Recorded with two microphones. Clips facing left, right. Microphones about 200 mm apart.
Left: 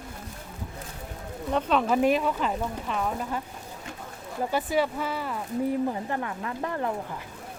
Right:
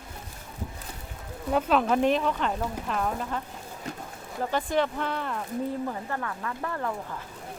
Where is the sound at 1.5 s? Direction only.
Centre (ahead or behind).